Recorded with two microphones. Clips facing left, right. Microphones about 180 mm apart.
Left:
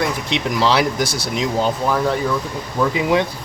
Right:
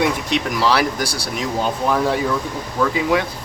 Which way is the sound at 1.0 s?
35° right (ahead or behind).